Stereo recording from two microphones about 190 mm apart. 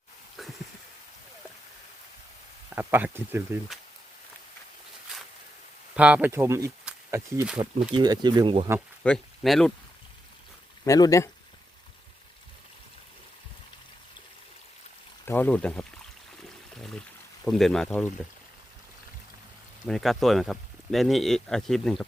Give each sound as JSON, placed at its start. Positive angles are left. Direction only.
{"t": 0.4, "sound": "a sound", "side_deg": 0}
{"t": 2.7, "sound": "speech", "side_deg": -10}
{"t": 6.0, "sound": "speech", "side_deg": -5}
{"t": 7.9, "sound": "speech", "side_deg": -20}
{"t": 9.0, "sound": "speech", "side_deg": 0}
{"t": 10.8, "sound": "speech", "side_deg": 15}
{"t": 15.3, "sound": "speech", "side_deg": 10}
{"t": 17.4, "sound": "speech", "side_deg": 0}
{"t": 19.9, "sound": "speech", "side_deg": 0}